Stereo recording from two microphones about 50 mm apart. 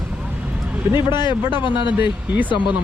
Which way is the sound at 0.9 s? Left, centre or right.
Right.